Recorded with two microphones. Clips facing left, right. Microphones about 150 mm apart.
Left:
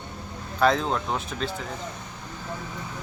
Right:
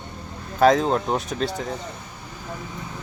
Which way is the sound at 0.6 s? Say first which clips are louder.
Right 5 dB; 45° right (ahead or behind).